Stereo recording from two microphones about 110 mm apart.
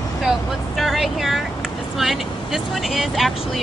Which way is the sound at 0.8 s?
Centre (ahead or behind).